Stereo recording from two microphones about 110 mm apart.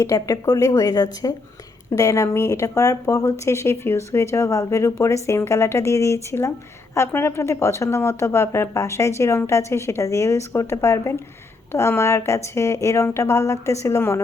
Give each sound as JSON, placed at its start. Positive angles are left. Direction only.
{"t": 0.0, "sound": "speech", "side_deg": 30}